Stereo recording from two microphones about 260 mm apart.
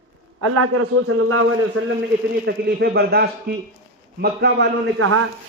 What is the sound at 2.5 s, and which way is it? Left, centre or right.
A man's voice, right.